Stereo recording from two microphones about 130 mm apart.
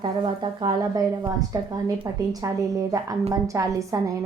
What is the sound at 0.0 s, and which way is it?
A woman's voice, 35° right (ahead or behind).